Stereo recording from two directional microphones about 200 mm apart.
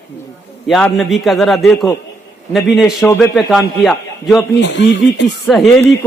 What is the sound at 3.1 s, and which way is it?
Speech, 10° left (ahead or behind).